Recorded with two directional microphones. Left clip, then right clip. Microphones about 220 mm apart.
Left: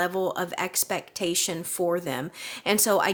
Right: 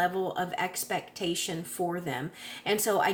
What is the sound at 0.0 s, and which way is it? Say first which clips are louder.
A woman's voice: left 2 dB; 45° left (ahead or behind).